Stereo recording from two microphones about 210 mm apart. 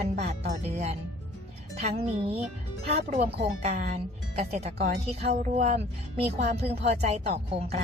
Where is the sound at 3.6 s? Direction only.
35° right (ahead or behind).